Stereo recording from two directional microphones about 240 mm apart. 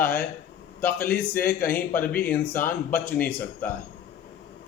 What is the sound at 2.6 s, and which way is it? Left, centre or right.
Speech, left.